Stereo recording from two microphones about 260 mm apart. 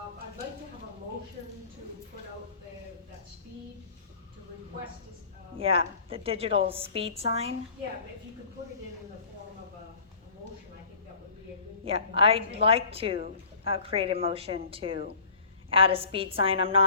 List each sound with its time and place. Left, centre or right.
5.5 s a woman's voice: right
11.9 s a woman's voice: right